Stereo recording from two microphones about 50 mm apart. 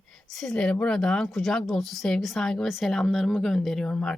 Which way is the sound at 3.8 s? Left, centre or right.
Left.